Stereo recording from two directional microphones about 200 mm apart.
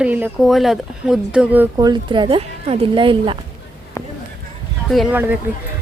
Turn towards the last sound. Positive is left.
turn(degrees=-10)  # may be behind; listen again after turning